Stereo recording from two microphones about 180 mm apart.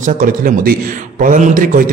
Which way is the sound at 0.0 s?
50° right (ahead or behind).